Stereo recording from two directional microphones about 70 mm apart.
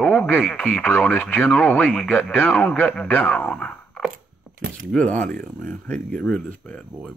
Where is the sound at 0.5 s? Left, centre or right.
Centre.